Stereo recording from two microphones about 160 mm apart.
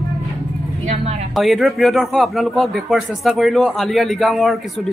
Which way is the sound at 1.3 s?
Centre (ahead or behind).